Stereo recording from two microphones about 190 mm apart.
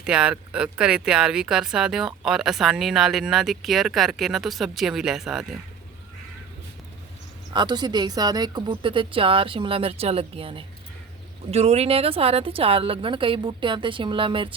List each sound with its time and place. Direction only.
0.0 s speech: 5° right (ahead or behind)
7.5 s speech: 25° right (ahead or behind)